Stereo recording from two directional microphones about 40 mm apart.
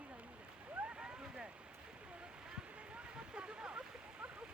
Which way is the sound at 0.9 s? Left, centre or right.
Right.